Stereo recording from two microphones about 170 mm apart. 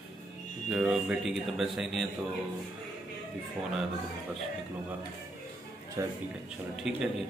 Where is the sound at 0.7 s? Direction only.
5° right (ahead or behind).